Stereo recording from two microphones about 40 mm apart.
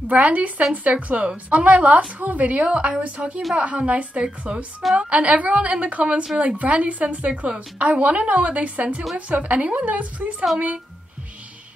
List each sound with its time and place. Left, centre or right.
0.1 s a woman's voice: right